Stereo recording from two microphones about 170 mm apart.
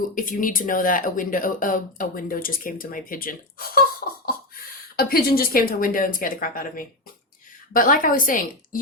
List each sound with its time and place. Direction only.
0.2 s a woman's voice: 55° left (ahead or behind)